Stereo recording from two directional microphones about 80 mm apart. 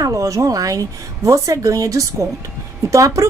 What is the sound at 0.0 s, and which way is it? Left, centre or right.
A woman's voice, right.